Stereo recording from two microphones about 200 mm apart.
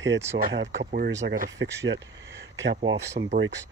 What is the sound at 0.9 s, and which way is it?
Speech, 55° right (ahead or behind).